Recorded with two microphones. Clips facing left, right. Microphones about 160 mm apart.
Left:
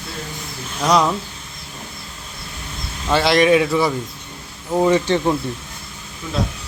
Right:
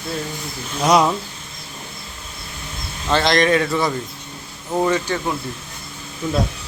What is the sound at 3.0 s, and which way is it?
Speech, 5° left (ahead or behind).